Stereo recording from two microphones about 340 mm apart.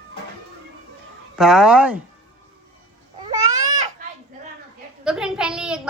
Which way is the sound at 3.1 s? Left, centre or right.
Right.